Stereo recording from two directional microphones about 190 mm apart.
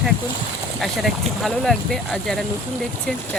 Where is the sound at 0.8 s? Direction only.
Centre (ahead or behind).